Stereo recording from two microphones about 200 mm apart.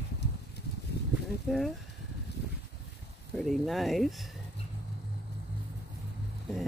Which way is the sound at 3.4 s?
Centre (ahead or behind).